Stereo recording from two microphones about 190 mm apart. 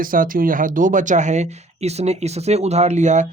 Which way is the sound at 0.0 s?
45° right (ahead or behind).